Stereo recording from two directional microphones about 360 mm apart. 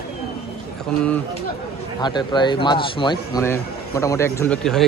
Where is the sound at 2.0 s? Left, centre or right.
Centre.